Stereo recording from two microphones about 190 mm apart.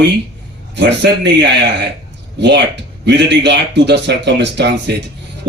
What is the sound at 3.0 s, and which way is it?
Speech, 65° right (ahead or behind).